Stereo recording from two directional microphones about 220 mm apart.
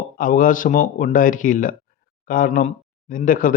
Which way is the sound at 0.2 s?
40° left (ahead or behind).